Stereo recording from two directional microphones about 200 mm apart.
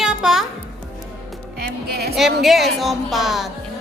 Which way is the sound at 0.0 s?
5° right (ahead or behind).